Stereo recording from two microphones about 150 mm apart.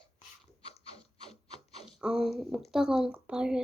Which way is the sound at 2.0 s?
5° right (ahead or behind).